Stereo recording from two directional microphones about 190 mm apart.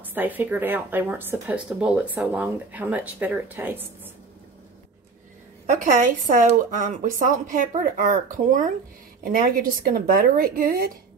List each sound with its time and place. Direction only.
0.0 s speech: 10° right (ahead or behind)
5.7 s speech: 45° right (ahead or behind)